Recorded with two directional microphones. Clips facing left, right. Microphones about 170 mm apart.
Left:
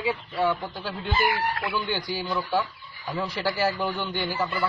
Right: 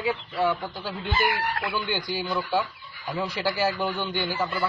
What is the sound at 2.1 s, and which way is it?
A man's voice, 10° right (ahead or behind).